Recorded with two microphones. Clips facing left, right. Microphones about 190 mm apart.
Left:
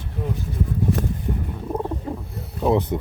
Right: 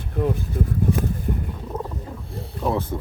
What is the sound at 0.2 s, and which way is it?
Speech, 55° right (ahead or behind).